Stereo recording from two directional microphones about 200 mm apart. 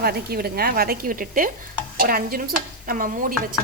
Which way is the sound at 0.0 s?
50° right (ahead or behind).